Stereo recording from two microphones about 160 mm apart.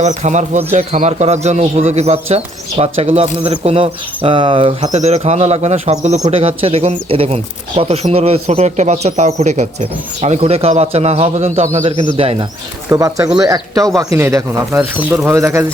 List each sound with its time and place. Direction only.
0.0 s speech: 45° right (ahead or behind)
12.9 s a man's voice: 20° right (ahead or behind)